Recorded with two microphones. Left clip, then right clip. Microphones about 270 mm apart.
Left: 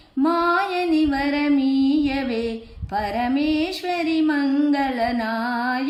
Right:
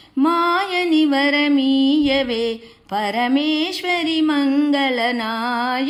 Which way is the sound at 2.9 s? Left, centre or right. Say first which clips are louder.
Right 4 dB; centre.